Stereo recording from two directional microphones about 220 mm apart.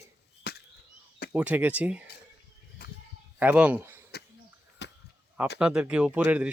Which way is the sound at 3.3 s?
5° right (ahead or behind).